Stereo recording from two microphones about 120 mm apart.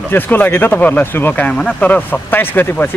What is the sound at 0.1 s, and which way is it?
Speech, 15° left (ahead or behind).